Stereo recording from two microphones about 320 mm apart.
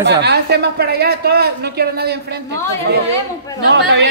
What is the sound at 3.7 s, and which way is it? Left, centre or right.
Speech, right.